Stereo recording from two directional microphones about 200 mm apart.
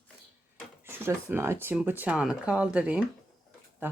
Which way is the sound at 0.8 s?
10° right (ahead or behind).